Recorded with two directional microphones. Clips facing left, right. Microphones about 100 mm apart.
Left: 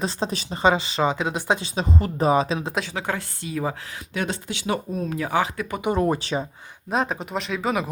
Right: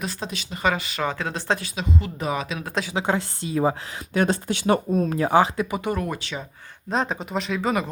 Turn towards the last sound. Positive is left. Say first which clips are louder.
# right 1 dB
turn(degrees=0)  # may be behind; listen again after turning